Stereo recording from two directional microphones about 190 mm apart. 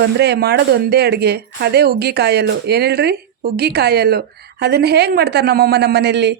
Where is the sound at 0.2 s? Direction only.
60° right (ahead or behind).